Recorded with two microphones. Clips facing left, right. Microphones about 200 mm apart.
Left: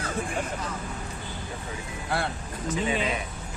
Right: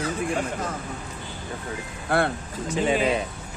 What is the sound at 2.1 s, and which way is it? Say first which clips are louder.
Speech: right 7 dB; 55° right (ahead or behind).